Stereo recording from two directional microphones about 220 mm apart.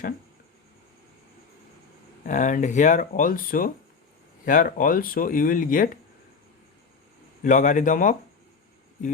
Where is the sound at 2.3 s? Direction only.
35° left (ahead or behind).